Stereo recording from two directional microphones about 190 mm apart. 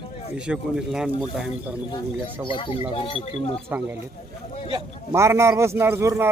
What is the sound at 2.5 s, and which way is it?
Speech, 25° left (ahead or behind).